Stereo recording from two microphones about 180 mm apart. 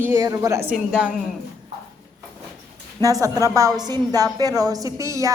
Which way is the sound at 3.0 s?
20° right (ahead or behind).